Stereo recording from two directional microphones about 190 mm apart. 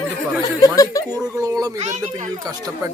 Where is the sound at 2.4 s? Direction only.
20° right (ahead or behind).